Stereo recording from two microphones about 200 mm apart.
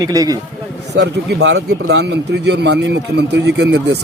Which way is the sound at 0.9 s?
60° right (ahead or behind).